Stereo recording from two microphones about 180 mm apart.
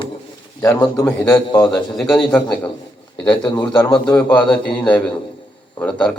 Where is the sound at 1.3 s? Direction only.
25° left (ahead or behind).